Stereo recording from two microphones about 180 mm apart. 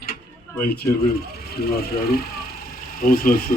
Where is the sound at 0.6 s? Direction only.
55° left (ahead or behind).